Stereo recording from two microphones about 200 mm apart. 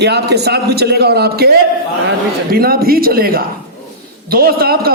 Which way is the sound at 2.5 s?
50° right (ahead or behind).